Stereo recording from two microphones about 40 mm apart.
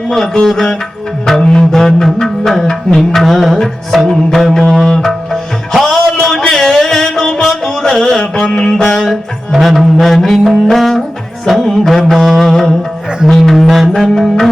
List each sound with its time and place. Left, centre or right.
0.4 s music: centre
8.2 s music: left
8.5 s music: centre